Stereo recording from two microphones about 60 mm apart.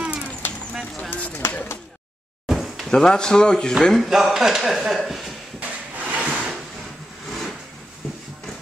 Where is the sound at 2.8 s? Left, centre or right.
Centre.